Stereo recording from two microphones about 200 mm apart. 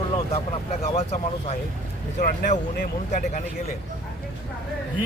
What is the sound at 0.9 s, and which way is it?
Speech, 35° left (ahead or behind).